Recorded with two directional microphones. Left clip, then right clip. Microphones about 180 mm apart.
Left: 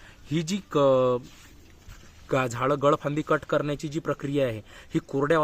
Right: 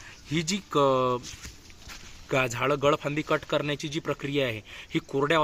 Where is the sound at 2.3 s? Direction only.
45° left (ahead or behind).